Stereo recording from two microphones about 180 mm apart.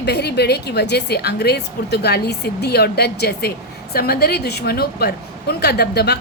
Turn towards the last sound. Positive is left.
turn(degrees=65)  # may be behind; listen again after turning